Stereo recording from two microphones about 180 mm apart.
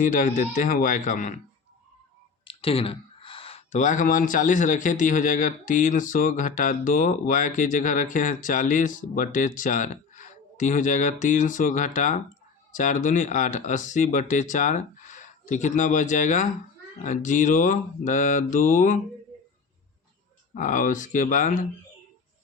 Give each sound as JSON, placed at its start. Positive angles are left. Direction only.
{"t": 0.0, "sound": "speech", "side_deg": 45}
{"t": 2.5, "sound": "speech", "side_deg": 30}
{"t": 20.6, "sound": "speech", "side_deg": 45}